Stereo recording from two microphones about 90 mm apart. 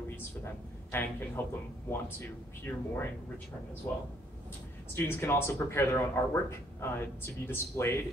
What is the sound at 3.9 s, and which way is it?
Speech, 25° left (ahead or behind).